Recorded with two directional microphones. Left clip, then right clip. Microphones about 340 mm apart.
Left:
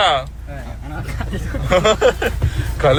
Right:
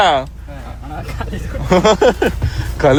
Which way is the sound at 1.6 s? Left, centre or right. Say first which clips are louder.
Right 2 dB; right.